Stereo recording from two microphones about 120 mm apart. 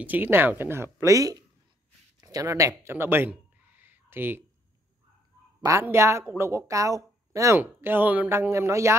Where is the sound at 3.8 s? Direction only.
15° right (ahead or behind).